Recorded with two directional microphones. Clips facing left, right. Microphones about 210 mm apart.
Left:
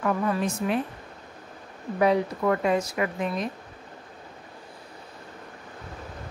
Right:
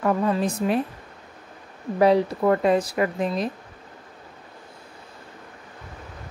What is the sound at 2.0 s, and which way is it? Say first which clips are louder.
Speech: right 4 dB; 35° right (ahead or behind).